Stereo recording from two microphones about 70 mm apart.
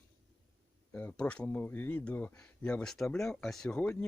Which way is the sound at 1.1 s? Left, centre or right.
Centre.